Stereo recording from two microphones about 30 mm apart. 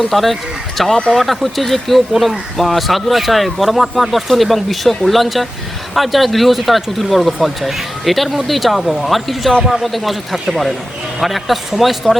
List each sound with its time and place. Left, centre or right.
0.0 s speech: centre
12.1 s a man's voice: left